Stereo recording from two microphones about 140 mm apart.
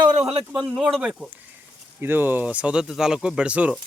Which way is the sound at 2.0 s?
15° right (ahead or behind).